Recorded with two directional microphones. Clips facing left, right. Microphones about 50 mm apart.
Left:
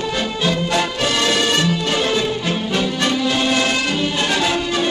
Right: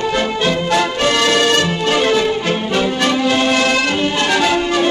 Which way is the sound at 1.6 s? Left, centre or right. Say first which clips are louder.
Right 4 dB; right.